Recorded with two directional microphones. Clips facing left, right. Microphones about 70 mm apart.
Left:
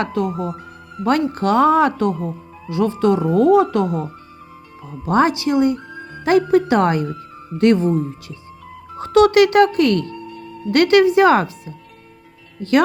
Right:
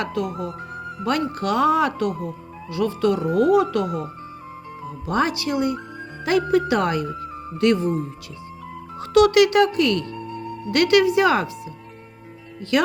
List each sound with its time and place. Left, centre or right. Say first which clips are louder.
0.0 s speech: left 4 dB; left
5.0 s speech: left 6 dB; left
9.0 s speech: left 3 dB; left